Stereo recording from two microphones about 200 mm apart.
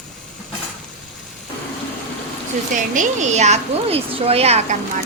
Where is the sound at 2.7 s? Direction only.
40° right (ahead or behind).